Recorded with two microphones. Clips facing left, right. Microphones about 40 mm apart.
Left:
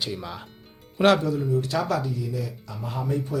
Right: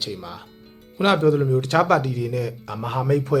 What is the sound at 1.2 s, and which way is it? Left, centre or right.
Speech, right.